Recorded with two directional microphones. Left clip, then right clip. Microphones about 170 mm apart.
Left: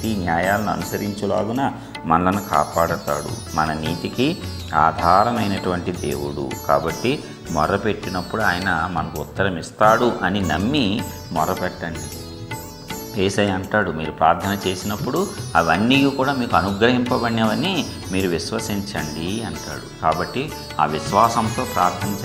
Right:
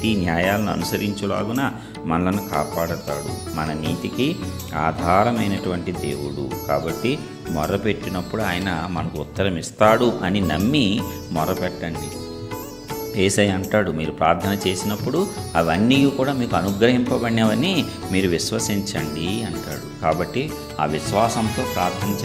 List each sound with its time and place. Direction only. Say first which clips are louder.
0.3 s speech: left 4 dB; 40° right (ahead or behind)
1.2 s speech: left 5 dB; 10° right (ahead or behind)
2.0 s speech: left 5 dB; 20° right (ahead or behind)
13.1 s speech: right 1 dB; 40° right (ahead or behind)
21.3 s speech: left 3 dB; centre (ahead or behind)